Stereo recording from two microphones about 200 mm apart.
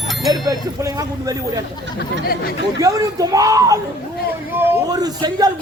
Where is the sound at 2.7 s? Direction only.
15° right (ahead or behind).